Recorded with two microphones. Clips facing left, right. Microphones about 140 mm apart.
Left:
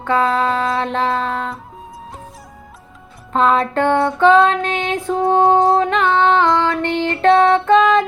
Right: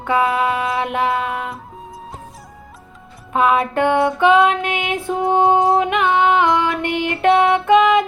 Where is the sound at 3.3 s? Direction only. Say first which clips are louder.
Left 1 dB; 10° right (ahead or behind).